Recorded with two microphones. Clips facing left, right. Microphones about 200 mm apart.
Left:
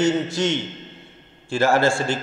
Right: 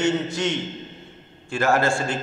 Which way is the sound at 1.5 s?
30° left (ahead or behind).